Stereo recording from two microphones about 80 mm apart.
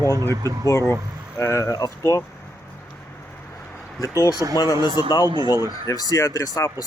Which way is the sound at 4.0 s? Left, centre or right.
Left.